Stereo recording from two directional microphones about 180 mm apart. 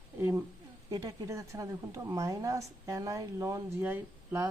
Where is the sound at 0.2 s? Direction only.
15° right (ahead or behind).